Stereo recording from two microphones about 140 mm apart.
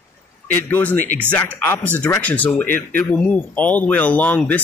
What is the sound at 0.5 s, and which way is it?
Speech, 15° left (ahead or behind).